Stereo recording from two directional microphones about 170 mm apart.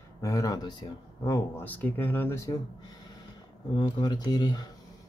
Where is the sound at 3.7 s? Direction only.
25° left (ahead or behind).